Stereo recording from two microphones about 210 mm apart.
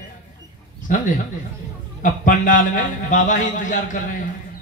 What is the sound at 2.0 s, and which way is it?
Speech, 40° left (ahead or behind).